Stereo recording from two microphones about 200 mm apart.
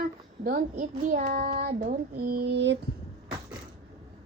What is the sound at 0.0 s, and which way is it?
Child singing, 45° right (ahead or behind).